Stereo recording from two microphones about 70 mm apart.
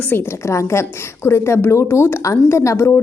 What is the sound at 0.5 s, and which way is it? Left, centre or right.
A woman's voice, left.